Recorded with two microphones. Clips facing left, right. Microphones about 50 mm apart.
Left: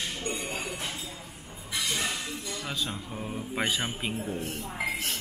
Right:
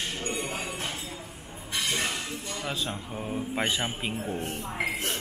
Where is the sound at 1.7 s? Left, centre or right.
Right.